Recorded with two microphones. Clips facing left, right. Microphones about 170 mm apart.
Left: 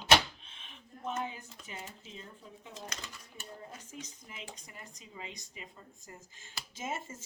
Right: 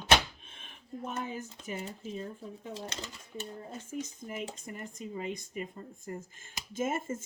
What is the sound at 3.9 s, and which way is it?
Speech, 50° right (ahead or behind).